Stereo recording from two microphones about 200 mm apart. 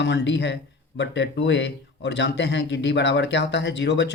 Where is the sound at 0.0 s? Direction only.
60° left (ahead or behind).